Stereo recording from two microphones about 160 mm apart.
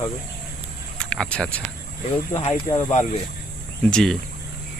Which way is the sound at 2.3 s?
40° left (ahead or behind).